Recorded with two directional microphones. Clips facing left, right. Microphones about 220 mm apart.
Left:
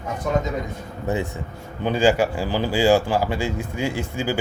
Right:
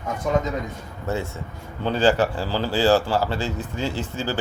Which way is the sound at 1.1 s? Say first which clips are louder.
Left 2 dB; 15° left (ahead or behind).